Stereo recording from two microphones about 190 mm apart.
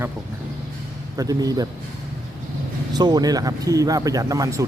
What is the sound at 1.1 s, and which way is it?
Speech, 20° right (ahead or behind).